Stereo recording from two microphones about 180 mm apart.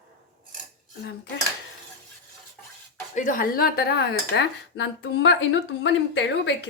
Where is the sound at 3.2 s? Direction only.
50° left (ahead or behind).